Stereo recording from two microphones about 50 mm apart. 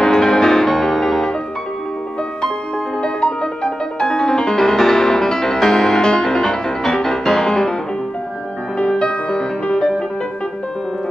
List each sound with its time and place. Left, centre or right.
0.0 s music: centre
3.0 s music: centre
8.7 s music: centre